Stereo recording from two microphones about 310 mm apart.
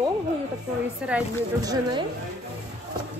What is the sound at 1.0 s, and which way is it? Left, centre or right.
Speech, centre.